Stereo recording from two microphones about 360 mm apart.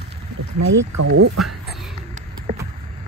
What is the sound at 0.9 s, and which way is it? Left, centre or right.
Speech, right.